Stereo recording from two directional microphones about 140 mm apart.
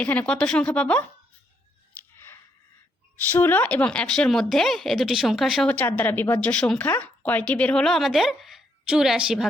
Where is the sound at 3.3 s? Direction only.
15° left (ahead or behind).